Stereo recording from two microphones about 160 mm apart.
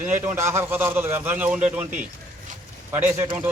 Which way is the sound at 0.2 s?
15° right (ahead or behind).